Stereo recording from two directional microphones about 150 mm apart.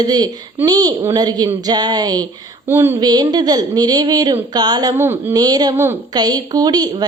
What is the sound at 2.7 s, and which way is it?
Speech, 15° right (ahead or behind).